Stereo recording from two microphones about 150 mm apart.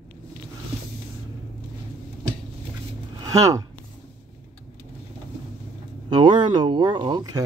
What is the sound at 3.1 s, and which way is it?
Speech, 25° right (ahead or behind).